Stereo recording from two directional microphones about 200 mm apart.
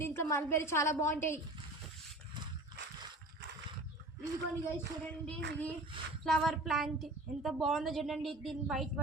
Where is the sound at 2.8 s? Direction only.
60° right (ahead or behind).